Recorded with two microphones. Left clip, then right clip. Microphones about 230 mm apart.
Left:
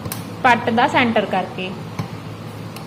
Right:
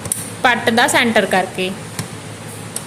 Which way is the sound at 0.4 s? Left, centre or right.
Right.